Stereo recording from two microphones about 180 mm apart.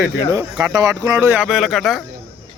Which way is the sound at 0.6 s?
20° right (ahead or behind).